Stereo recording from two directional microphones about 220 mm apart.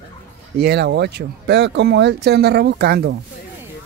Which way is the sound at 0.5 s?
50° right (ahead or behind).